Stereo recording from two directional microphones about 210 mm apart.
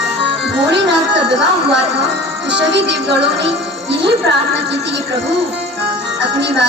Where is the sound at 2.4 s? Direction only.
55° right (ahead or behind).